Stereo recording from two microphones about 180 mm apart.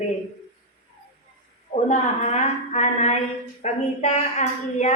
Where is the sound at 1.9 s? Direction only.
40° left (ahead or behind).